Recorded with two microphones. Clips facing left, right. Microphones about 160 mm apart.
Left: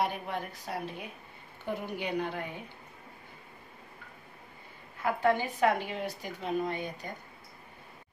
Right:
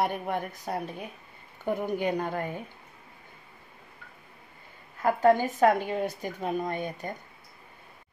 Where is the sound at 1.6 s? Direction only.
45° right (ahead or behind).